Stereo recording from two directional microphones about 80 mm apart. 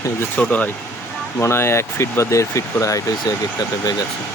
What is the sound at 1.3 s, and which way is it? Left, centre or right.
Speech, left.